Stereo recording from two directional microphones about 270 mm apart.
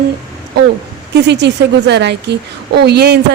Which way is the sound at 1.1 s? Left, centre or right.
Right.